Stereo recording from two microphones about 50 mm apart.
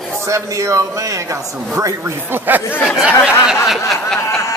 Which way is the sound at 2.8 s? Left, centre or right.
Centre.